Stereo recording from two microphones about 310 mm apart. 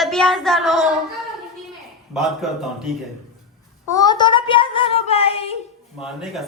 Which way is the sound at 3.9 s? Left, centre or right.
Centre.